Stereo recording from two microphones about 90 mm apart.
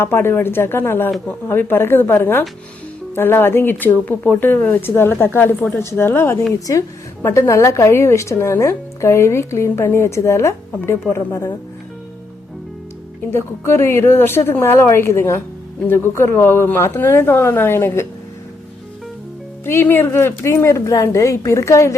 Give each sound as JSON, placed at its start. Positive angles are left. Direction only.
{"t": 0.0, "sound": "a woman's voice", "side_deg": 25}
{"t": 13.3, "sound": "speech", "side_deg": 30}
{"t": 19.6, "sound": "a woman's voice", "side_deg": 25}